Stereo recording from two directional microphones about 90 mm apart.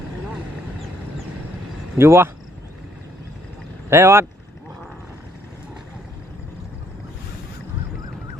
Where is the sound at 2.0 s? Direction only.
30° right (ahead or behind).